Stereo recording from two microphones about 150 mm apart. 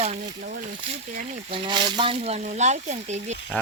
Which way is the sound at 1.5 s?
35° right (ahead or behind).